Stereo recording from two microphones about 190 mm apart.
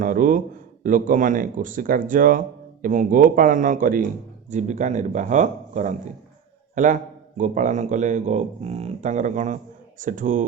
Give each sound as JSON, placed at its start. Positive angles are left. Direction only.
{"t": 0.0, "sound": "a man's voice", "side_deg": -45}